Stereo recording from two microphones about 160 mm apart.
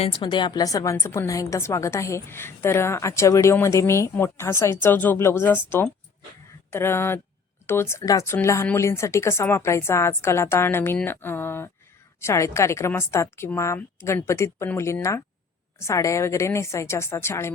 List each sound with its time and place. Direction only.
0.0 s a woman's voice: 30° left (ahead or behind); by 17.5 s 15° left (ahead or behind)